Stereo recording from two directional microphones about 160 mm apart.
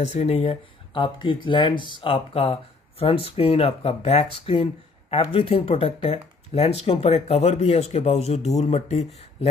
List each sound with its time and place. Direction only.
0.0 s speech: 40° left (ahead or behind)